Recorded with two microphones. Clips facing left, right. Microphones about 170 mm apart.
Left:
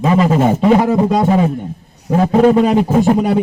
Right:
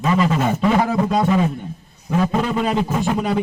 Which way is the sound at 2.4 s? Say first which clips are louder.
Left 10 dB; 45° left (ahead or behind).